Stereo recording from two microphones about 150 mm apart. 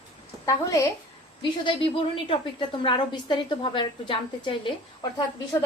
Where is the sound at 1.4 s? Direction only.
35° left (ahead or behind).